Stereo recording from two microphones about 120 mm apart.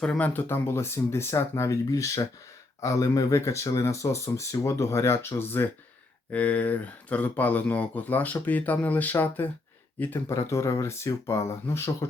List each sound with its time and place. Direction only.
0.0 s speech: 10° left (ahead or behind)